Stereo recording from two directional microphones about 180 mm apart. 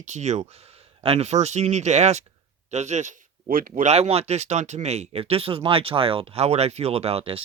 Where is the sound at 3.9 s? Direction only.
35° right (ahead or behind).